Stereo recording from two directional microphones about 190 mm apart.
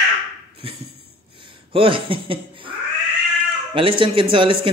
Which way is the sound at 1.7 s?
30° right (ahead or behind).